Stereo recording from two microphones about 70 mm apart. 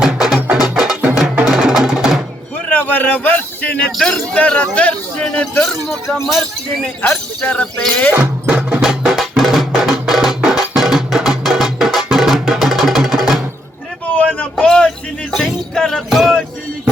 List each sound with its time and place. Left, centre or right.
0.0 s music: centre
0.3 s music: centre
0.6 s music: centre
2.6 s a sound: left
3.9 s speech: centre
4.4 s speech: left
7.0 s speech: left
7.6 s speech: centre
8.1 s music: centre
14.1 s a sound: left
14.8 s a sound: centre
16.0 s music: centre